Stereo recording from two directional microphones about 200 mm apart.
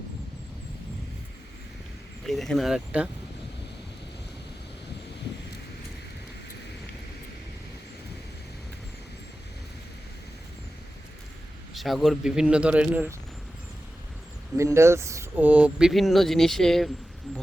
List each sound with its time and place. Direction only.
2.2 s speech: centre (ahead or behind)
11.7 s speech: centre (ahead or behind)
14.5 s speech: 15° right (ahead or behind); by 16.9 s centre (ahead or behind)